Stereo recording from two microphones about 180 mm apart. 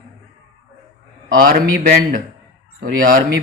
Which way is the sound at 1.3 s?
55° right (ahead or behind).